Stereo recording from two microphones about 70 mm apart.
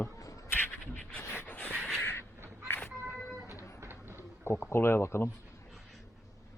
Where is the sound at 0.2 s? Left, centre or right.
Left.